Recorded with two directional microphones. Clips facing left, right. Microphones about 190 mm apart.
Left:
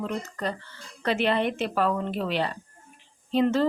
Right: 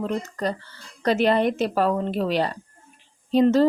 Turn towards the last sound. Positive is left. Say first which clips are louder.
# right 5 dB
turn(degrees=-40)  # may be behind; listen again after turning